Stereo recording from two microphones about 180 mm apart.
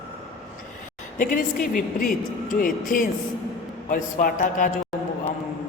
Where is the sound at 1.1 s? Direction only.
45° left (ahead or behind).